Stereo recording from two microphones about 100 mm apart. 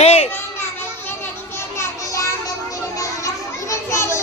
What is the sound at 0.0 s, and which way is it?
Children playing, 90° left.